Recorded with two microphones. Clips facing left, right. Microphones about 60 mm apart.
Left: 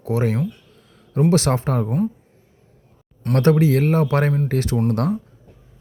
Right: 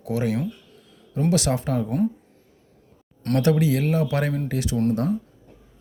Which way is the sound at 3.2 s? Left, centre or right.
Centre.